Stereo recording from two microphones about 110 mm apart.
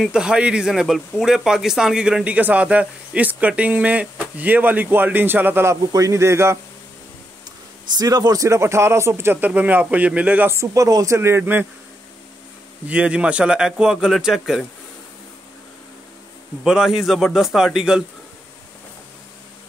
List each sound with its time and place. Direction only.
0.0 s speech: 5° right (ahead or behind); by 6.6 s 25° right (ahead or behind)
7.9 s speech: 35° right (ahead or behind); by 10.5 s 10° right (ahead or behind)
10.5 s speech: 30° right (ahead or behind)
12.8 s speech: 10° right (ahead or behind)
16.6 s a man's voice: 5° right (ahead or behind)